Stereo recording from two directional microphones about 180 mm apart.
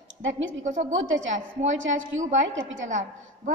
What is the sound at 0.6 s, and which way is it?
Speech, 45° right (ahead or behind).